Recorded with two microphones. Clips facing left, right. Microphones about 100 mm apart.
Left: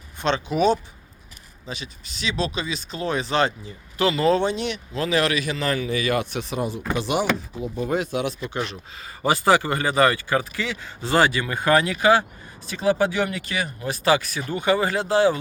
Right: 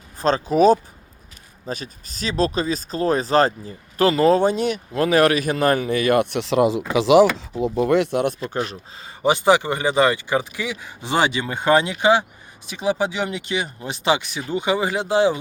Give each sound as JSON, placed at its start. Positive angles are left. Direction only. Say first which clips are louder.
{"t": 0.2, "sound": "speech", "louder": "right 5 dB", "side_deg": -40}
{"t": 8.4, "sound": "speech", "louder": "right 3 dB", "side_deg": -40}
{"t": 9.2, "sound": "speech", "louder": "right 2 dB", "side_deg": -20}